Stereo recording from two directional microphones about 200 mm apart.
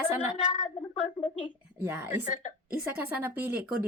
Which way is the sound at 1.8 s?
10° right (ahead or behind).